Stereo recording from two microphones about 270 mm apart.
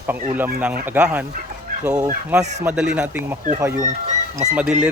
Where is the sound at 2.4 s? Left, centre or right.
Right.